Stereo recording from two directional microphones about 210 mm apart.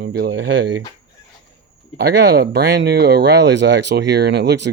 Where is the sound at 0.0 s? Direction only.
55° right (ahead or behind).